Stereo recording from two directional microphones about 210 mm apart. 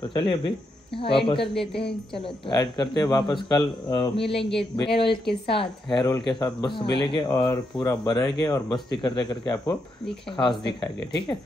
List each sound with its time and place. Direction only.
0.1 s speech: 25° left (ahead or behind)